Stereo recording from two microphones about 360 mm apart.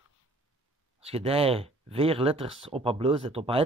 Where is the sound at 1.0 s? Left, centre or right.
Centre.